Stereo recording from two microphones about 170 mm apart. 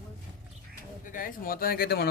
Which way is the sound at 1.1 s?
55° left (ahead or behind).